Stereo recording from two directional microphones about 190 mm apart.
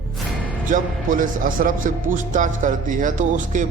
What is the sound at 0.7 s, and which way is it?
Speech, 45° right (ahead or behind).